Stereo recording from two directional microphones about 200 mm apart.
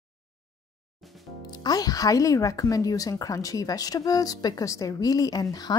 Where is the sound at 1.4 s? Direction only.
20° left (ahead or behind).